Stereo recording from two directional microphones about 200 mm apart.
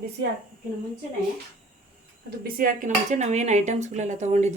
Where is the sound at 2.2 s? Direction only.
45° right (ahead or behind).